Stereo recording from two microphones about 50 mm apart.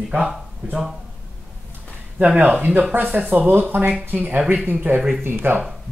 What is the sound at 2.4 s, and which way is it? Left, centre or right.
Speech, right.